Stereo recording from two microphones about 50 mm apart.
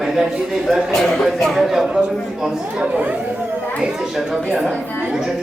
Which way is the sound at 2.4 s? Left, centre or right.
Centre.